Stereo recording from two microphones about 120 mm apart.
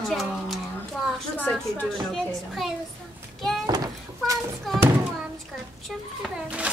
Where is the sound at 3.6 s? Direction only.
35° right (ahead or behind).